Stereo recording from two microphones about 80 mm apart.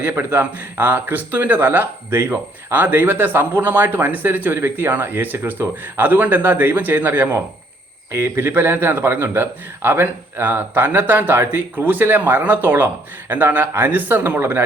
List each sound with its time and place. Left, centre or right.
0.0 s speech: right